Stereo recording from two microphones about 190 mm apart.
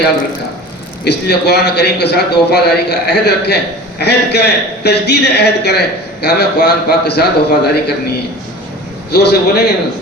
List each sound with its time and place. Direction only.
1.0 s a man's voice: 60° left (ahead or behind)
9.1 s a man's voice: 60° left (ahead or behind)